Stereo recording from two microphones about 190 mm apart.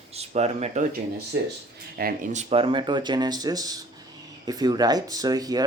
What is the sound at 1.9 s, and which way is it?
Speech, 45° right (ahead or behind).